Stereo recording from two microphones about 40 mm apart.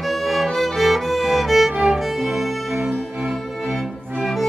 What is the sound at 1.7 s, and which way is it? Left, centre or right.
Music, centre.